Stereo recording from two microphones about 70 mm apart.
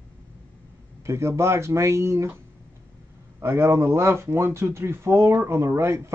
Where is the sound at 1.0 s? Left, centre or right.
Right.